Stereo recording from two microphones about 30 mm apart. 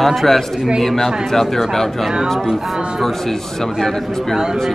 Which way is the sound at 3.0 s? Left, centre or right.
Centre.